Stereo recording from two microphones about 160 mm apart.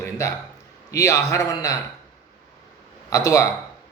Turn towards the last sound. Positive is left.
turn(degrees=20)  # may be behind; listen again after turning